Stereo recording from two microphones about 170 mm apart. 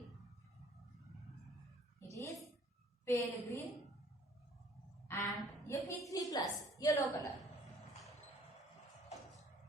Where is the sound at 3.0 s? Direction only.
15° left (ahead or behind).